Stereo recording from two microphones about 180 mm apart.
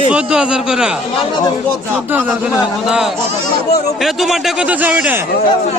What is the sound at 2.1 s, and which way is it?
Speech, 5° right (ahead or behind).